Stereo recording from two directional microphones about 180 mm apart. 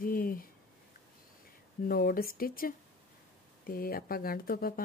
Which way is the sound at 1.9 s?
55° left (ahead or behind).